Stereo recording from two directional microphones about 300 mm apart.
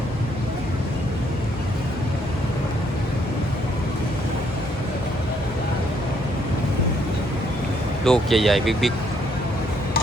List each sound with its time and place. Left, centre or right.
8.0 s speech: centre